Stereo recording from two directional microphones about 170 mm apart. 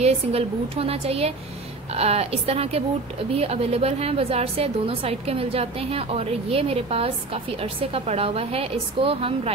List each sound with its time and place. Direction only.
0.0 s a woman's voice: 35° right (ahead or behind)